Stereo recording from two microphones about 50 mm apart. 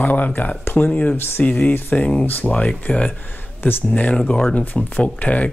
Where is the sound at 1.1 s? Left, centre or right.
Left.